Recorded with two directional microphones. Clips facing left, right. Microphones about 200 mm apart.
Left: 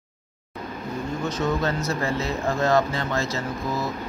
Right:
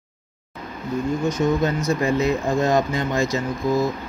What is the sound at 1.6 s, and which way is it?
Speech, 15° right (ahead or behind).